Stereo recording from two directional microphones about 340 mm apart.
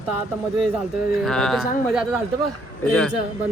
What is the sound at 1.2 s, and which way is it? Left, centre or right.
Speech, centre.